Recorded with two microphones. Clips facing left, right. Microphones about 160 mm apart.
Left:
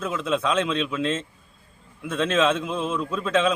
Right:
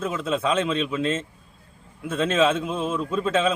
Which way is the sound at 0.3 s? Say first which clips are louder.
Even; 5° right (ahead or behind).